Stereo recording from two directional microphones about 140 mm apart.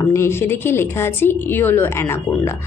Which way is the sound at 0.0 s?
20° left (ahead or behind).